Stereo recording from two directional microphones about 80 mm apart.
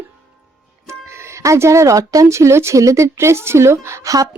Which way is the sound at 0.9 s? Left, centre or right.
Right.